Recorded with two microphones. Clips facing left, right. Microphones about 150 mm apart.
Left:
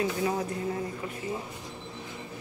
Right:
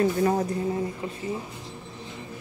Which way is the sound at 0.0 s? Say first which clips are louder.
Right 6 dB; 45° right (ahead or behind).